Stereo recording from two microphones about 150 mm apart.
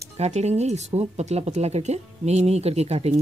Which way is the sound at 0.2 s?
45° right (ahead or behind).